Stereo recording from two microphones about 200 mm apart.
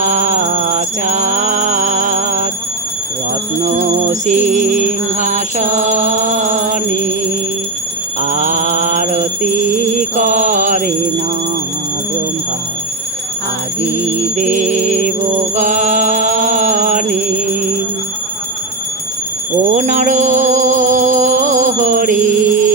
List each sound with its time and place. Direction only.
0.0 s music: 35° right (ahead or behind)
3.6 s music: 35° right (ahead or behind)
8.2 s music: 40° right (ahead or behind)
14.3 s music: 35° right (ahead or behind)
19.7 s music: 35° right (ahead or behind)